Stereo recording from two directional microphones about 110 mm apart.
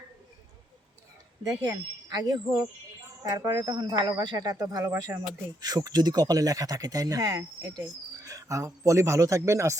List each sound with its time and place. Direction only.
2.1 s speech: 35° right (ahead or behind)
4.4 s a man's voice: 35° right (ahead or behind)